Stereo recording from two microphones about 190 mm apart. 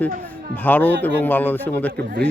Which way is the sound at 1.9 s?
60° right (ahead or behind).